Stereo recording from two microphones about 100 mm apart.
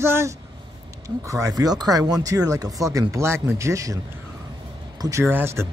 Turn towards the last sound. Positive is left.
turn(degrees=-25)  # may be behind; listen again after turning